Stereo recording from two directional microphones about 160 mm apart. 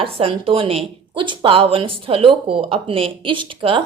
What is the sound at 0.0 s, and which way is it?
A woman's voice, 35° right (ahead or behind).